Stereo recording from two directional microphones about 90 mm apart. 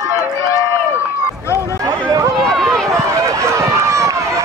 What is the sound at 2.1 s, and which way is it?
Run, 40° right (ahead or behind).